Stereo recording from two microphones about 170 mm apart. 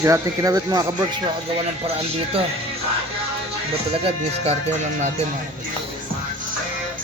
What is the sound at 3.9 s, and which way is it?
Speech, 35° right (ahead or behind).